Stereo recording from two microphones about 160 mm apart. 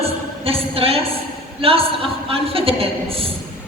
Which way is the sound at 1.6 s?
35° right (ahead or behind).